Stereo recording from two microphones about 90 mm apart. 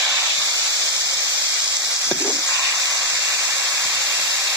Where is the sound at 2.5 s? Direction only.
35° right (ahead or behind).